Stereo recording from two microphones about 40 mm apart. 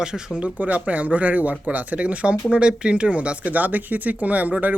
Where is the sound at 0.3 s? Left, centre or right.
Right.